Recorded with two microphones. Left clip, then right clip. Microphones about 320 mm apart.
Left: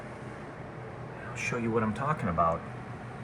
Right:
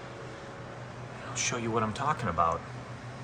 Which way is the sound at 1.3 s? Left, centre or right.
Centre.